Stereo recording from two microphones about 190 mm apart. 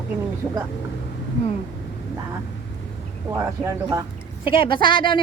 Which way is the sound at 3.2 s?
15° right (ahead or behind).